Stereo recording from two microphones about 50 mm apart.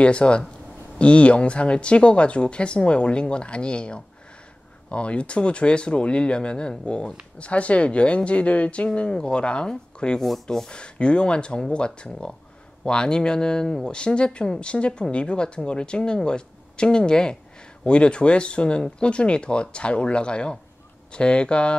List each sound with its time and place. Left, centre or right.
0.0 s speech: left